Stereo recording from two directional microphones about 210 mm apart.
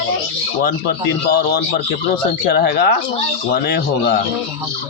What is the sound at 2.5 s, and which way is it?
Speech, 50° left (ahead or behind).